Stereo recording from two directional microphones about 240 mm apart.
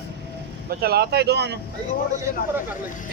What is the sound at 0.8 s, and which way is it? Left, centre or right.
Speech, right.